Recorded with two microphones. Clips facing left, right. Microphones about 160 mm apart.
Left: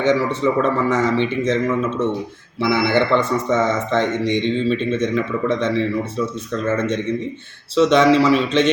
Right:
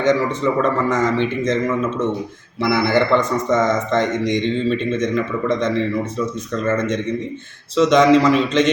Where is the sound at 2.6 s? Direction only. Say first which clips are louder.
Right 1 dB; 10° right (ahead or behind).